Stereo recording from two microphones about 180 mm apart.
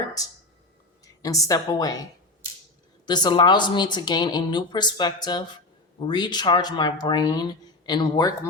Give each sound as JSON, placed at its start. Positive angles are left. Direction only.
{"t": 1.0, "sound": "a woman's voice", "side_deg": 20}
{"t": 3.1, "sound": "speech", "side_deg": 25}